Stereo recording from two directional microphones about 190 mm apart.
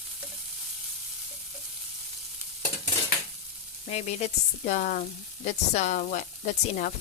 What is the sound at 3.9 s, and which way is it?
Speech, 35° left (ahead or behind).